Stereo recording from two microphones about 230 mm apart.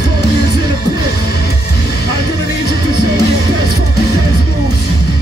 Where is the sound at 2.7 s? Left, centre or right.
Right.